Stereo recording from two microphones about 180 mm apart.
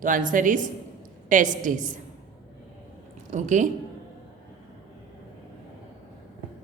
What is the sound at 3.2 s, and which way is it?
Speech, 40° right (ahead or behind).